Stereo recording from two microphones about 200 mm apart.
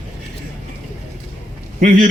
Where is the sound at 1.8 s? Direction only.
40° right (ahead or behind).